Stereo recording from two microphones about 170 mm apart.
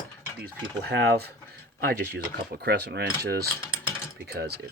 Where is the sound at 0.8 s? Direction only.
70° right (ahead or behind).